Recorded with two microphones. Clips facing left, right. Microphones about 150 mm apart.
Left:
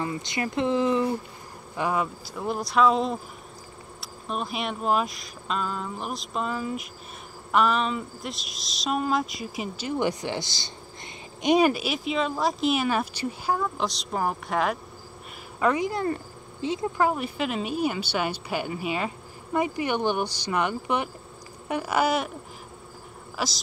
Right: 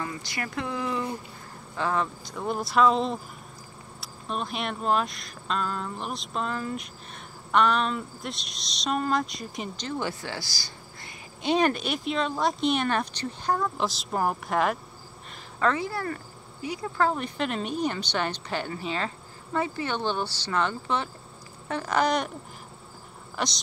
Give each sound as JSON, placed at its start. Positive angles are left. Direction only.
{"t": 0.0, "sound": "speech", "side_deg": 20}
{"t": 11.4, "sound": "speech", "side_deg": 10}
{"t": 15.6, "sound": "speech", "side_deg": 15}
{"t": 23.3, "sound": "speech", "side_deg": 5}